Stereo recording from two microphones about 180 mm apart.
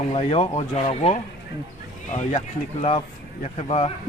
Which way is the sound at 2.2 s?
40° left (ahead or behind).